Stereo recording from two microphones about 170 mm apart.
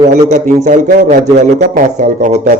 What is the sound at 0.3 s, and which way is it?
Speech, 45° right (ahead or behind).